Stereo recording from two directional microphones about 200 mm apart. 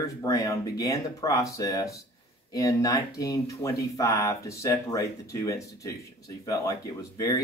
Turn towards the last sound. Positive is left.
turn(degrees=15)  # may be behind; listen again after turning